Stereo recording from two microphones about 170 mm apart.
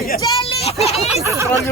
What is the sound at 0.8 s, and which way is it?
Speech, 40° left (ahead or behind).